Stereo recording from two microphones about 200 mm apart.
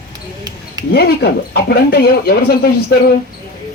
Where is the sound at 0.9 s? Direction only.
55° left (ahead or behind).